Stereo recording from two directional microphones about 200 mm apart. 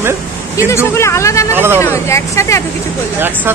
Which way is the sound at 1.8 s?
15° left (ahead or behind).